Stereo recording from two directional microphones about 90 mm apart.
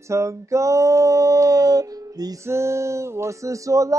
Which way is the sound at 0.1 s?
35° right (ahead or behind).